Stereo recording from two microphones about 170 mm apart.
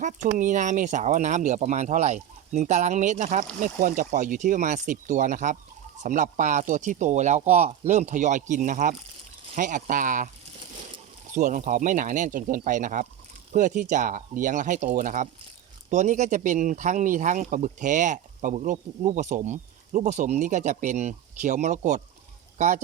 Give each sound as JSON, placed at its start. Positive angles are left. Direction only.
{"t": 0.0, "sound": "speech", "side_deg": -50}
{"t": 11.3, "sound": "speech", "side_deg": -45}